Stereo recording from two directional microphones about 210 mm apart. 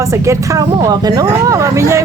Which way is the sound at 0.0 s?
15° right (ahead or behind).